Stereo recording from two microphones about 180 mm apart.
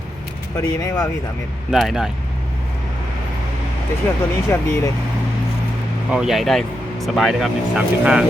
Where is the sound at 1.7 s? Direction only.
Centre (ahead or behind).